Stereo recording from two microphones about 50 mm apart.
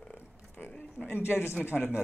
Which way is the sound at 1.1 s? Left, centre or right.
Left.